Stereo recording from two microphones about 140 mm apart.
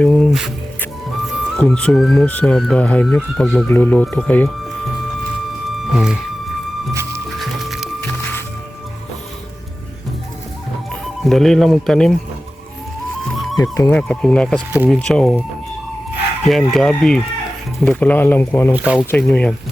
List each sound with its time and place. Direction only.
0.0 s music: 5° left (ahead or behind)
1.5 s speech: 5° left (ahead or behind)
5.7 s music: 5° right (ahead or behind)
6.9 s music: 20° right (ahead or behind)
7.3 s music: centre (ahead or behind)
11.0 s speech: centre (ahead or behind)
13.6 s speech: 25° left (ahead or behind)
13.9 s speech: 5° left (ahead or behind)
16.5 s speech: centre (ahead or behind)
18.7 s speech: 10° right (ahead or behind)
19.1 s speech: 5° left (ahead or behind)